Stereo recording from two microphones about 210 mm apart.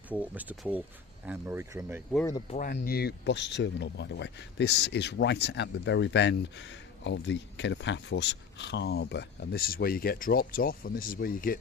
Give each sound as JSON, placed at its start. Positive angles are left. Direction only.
{"t": 0.1, "sound": "speech", "side_deg": -5}
{"t": 2.5, "sound": "speech", "side_deg": 40}